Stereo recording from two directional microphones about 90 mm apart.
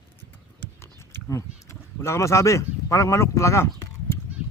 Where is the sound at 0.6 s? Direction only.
25° left (ahead or behind).